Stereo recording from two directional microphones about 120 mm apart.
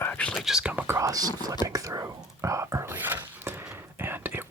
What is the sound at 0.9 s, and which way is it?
Speech, 30° right (ahead or behind).